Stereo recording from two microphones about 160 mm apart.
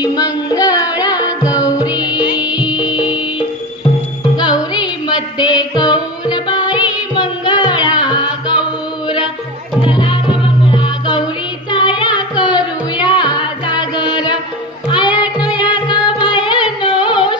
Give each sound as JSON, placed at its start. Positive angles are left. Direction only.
{"t": 0.0, "sound": "music", "side_deg": 25}
{"t": 2.1, "sound": "music", "side_deg": -5}
{"t": 4.4, "sound": "music", "side_deg": 25}
{"t": 9.8, "sound": "music", "side_deg": 35}